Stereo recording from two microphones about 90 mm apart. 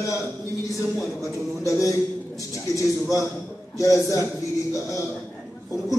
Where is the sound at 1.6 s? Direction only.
35° left (ahead or behind).